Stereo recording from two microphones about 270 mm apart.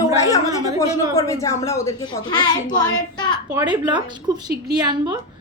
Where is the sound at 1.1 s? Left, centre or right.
Centre.